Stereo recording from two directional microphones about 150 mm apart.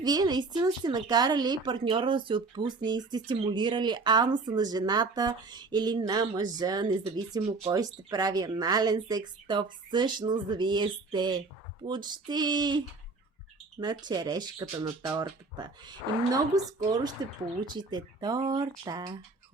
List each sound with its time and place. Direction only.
0.0 s a woman's voice: 25° right (ahead or behind)